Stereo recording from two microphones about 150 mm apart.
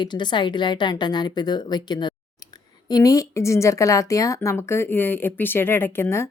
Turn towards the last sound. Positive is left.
turn(degrees=15)  # may be behind; listen again after turning